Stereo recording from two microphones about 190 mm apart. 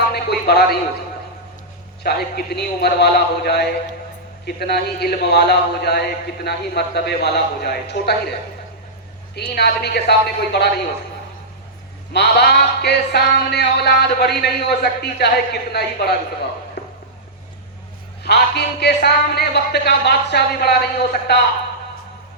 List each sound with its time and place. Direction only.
0.1 s a sound: 60° left (ahead or behind)
2.0 s a man's voice: 55° left (ahead or behind)
9.3 s a man's voice: 60° left (ahead or behind)
12.1 s a man's voice: 60° left (ahead or behind)
18.2 s a man's voice: 60° left (ahead or behind)